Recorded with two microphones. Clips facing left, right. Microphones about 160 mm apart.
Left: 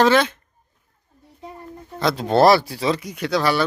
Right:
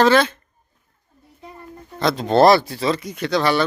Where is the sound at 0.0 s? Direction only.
15° left (ahead or behind).